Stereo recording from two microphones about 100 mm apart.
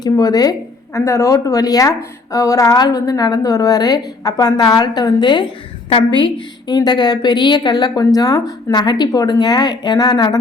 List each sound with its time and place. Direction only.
0.0 s a woman's voice: 40° left (ahead or behind)
0.9 s a woman's voice: 30° left (ahead or behind); by 10.3 s 50° left (ahead or behind)